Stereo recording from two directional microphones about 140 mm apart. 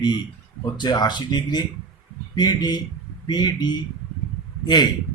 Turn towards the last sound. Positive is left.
turn(degrees=30)  # may be behind; listen again after turning